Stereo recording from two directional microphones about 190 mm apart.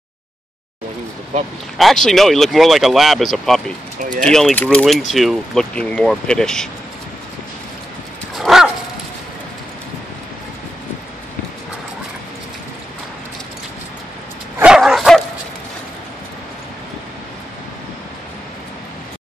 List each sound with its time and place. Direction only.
1.8 s speech: centre (ahead or behind)
8.4 s dog: centre (ahead or behind)
14.6 s dog: 5° right (ahead or behind)